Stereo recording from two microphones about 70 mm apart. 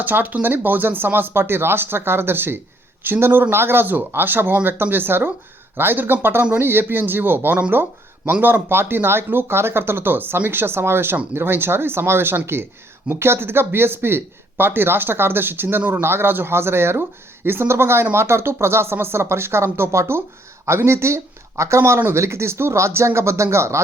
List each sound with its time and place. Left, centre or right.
0.0 s speech: right